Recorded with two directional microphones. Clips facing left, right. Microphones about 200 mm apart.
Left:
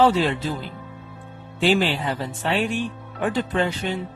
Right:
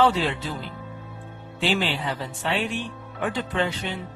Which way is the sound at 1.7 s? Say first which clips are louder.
Left 4 dB; 45° left (ahead or behind).